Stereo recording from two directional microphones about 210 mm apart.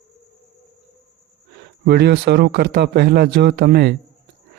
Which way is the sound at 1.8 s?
50° right (ahead or behind).